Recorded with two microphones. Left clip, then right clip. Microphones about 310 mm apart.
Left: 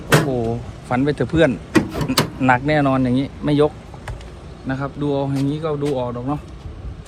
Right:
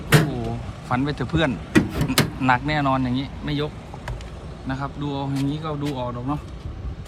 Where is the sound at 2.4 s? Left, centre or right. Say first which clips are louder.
Left 5 dB; centre.